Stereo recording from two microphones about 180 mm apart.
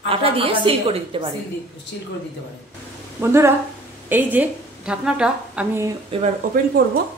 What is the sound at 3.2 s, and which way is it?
A woman's voice, 15° right (ahead or behind).